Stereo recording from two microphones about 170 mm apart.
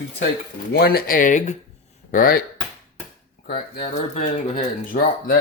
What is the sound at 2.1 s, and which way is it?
Speech, 65° left (ahead or behind).